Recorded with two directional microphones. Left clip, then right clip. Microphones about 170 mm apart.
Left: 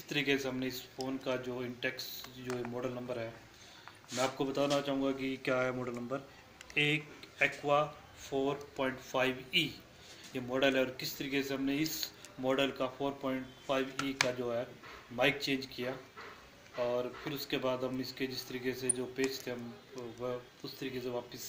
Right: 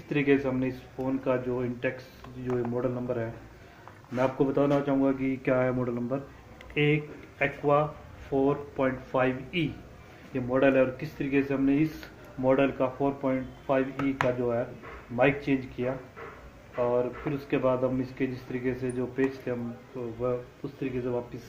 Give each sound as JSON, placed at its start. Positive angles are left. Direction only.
{"t": 0.1, "sound": "speech", "side_deg": 15}
{"t": 4.4, "sound": "speech", "side_deg": 10}